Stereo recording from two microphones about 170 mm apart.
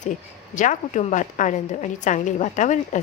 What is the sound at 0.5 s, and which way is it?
A woman's voice, 45° left (ahead or behind).